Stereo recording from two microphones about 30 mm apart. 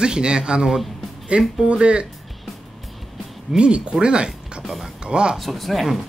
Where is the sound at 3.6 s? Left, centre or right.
Right.